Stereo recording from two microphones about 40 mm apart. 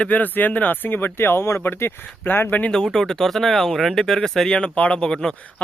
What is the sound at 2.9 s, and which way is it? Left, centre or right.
Speech, centre.